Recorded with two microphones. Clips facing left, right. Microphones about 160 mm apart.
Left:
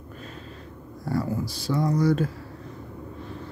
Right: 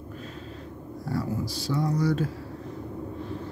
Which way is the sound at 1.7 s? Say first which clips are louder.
Left 3 dB; 55° left (ahead or behind).